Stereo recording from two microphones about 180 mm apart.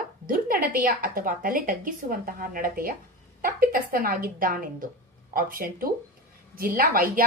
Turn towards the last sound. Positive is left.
turn(degrees=-50)  # may be behind; listen again after turning